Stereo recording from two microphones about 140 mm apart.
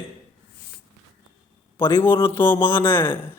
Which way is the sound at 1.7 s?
15° left (ahead or behind).